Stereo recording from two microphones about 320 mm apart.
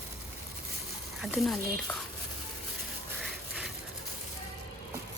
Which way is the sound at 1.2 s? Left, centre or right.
Centre.